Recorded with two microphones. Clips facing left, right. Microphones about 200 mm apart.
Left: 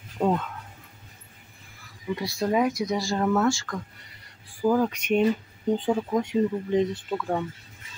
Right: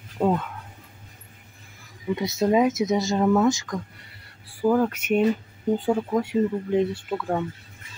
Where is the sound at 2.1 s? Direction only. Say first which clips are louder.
Right 4 dB; 20° right (ahead or behind).